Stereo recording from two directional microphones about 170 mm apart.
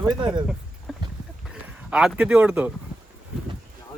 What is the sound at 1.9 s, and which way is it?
Speech, 5° right (ahead or behind).